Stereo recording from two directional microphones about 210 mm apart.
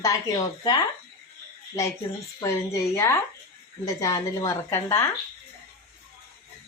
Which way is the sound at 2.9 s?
10° left (ahead or behind).